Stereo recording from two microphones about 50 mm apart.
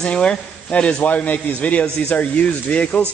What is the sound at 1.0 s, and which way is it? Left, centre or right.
A man's voice, left.